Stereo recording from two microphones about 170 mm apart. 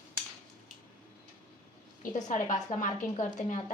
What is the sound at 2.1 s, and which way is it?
A woman's voice, 50° left (ahead or behind).